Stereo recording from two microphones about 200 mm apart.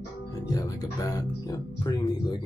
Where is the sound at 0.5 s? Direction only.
20° left (ahead or behind).